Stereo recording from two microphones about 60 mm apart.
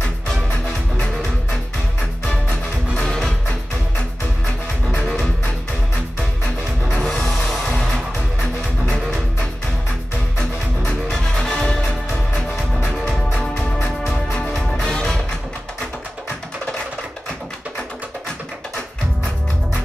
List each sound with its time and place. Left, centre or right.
2.2 s music: centre
7.1 s music: centre
10.9 s music: centre